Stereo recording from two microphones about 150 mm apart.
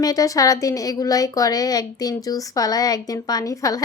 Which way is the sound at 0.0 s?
25° left (ahead or behind).